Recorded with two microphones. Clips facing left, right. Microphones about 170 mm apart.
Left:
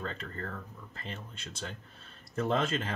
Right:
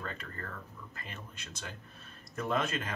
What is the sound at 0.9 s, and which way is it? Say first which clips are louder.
Speech: left 5 dB; 30° left (ahead or behind).